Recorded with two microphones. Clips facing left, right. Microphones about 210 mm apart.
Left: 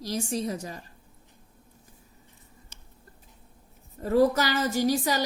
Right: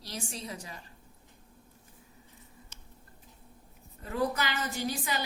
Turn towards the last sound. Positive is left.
turn(degrees=40)  # may be behind; listen again after turning